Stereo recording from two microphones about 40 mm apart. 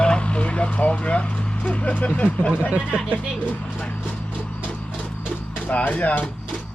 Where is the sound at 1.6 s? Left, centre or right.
Left.